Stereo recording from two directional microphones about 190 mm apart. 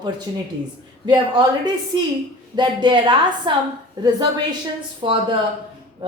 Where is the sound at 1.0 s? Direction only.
25° right (ahead or behind).